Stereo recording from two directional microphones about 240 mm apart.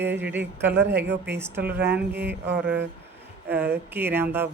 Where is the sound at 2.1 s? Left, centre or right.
Right.